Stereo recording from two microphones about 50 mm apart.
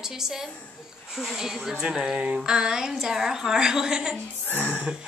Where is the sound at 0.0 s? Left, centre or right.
Centre.